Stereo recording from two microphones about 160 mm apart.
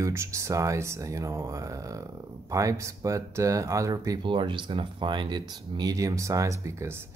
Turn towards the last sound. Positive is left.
turn(degrees=-15)  # may be behind; listen again after turning